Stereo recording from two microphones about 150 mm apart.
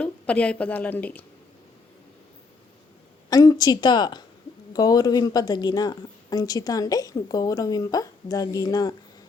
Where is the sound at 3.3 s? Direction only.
25° left (ahead or behind).